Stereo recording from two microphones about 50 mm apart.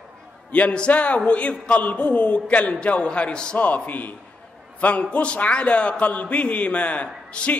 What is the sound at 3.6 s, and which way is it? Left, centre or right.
A man's voice, left.